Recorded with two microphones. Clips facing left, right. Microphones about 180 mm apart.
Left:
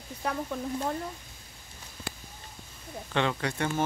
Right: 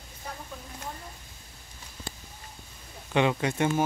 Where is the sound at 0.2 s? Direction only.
70° left (ahead or behind).